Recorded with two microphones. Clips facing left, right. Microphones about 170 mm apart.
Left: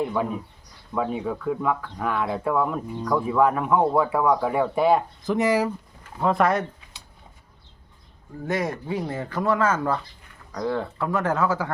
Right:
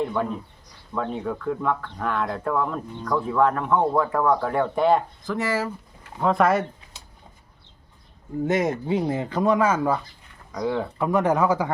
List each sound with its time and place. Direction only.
0.0 s speech: 5° left (ahead or behind)
5.2 s speech: 20° left (ahead or behind)
6.1 s speech: centre (ahead or behind)
8.4 s speech: 20° right (ahead or behind)